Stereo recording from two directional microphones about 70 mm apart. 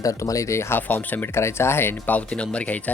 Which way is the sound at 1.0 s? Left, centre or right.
Left.